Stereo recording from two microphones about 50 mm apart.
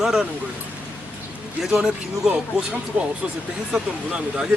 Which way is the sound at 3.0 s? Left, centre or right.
Right.